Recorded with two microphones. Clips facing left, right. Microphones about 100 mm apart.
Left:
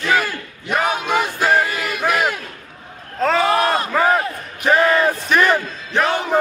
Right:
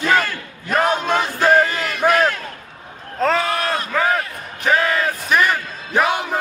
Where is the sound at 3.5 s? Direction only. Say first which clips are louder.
Left 5 dB; 25° left (ahead or behind).